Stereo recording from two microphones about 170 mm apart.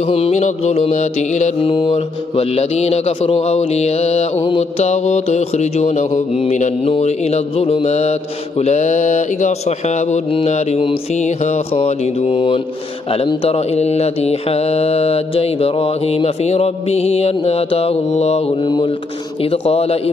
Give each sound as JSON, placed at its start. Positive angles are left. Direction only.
{"t": 0.0, "sound": "mantra", "side_deg": 35}